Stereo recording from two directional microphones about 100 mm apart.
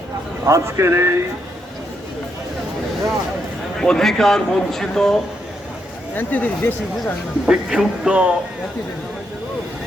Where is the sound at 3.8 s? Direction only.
5° left (ahead or behind).